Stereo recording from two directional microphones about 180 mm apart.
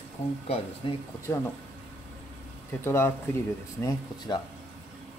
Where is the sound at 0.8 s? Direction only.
30° left (ahead or behind).